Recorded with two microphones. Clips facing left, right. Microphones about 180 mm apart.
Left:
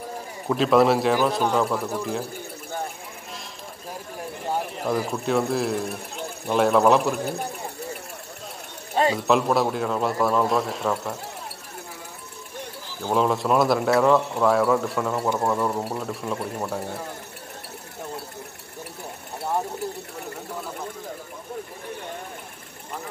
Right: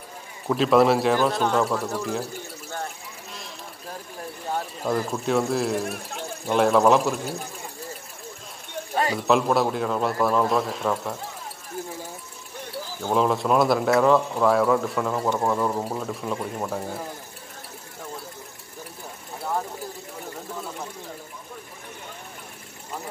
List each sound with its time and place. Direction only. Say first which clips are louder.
0.5 s speech: even; centre (ahead or behind)
4.5 s speech: left 1 dB; 10° left (ahead or behind)
8.9 s a sound: left 3 dB; 25° left (ahead or behind)
9.3 s speech: right 3 dB; centre (ahead or behind)
13.1 s speech: even; centre (ahead or behind)